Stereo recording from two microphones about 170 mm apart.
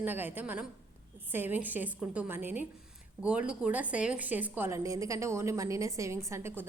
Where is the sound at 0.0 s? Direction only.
10° right (ahead or behind).